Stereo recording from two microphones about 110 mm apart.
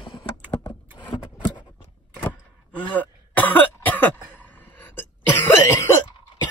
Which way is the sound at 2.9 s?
15° left (ahead or behind).